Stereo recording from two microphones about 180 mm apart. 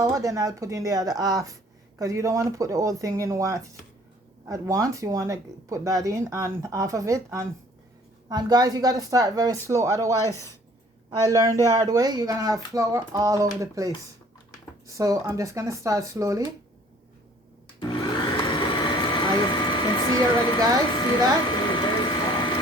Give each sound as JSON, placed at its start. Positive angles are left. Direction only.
{"t": 0.0, "sound": "speech", "side_deg": -20}
{"t": 10.2, "sound": "speech", "side_deg": 15}
{"t": 11.1, "sound": "speech", "side_deg": -20}
{"t": 17.7, "sound": "vacuum cleaner", "side_deg": 25}
{"t": 18.6, "sound": "a sound", "side_deg": 25}
{"t": 21.7, "sound": "ratchet", "side_deg": 25}